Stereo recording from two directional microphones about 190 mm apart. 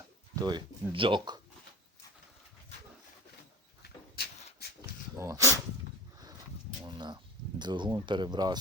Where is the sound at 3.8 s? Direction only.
60° left (ahead or behind).